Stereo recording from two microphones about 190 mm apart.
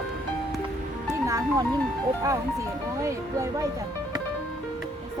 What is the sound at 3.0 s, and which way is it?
Speech, 15° right (ahead or behind).